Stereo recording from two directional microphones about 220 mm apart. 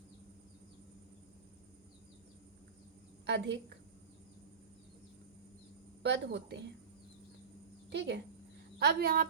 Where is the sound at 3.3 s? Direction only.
50° right (ahead or behind).